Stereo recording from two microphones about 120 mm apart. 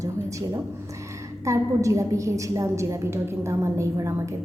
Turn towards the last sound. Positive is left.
turn(degrees=-25)  # may be behind; listen again after turning